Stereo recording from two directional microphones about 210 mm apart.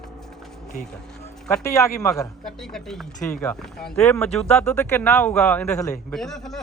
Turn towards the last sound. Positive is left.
turn(degrees=0)  # may be behind; listen again after turning